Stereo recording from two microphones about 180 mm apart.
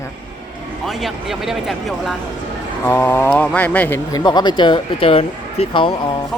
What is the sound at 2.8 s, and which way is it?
Speech, 10° left (ahead or behind).